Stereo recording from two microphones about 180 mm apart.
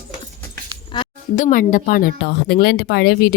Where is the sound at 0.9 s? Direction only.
25° left (ahead or behind).